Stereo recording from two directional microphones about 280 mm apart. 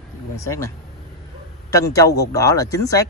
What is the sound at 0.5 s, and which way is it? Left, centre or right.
Speech, centre.